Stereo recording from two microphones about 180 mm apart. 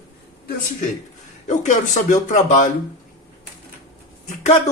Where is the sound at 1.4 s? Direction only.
40° left (ahead or behind).